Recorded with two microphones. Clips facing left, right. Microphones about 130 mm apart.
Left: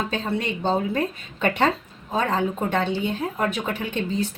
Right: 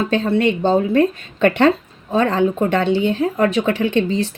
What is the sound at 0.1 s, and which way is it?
Speech, 70° right (ahead or behind).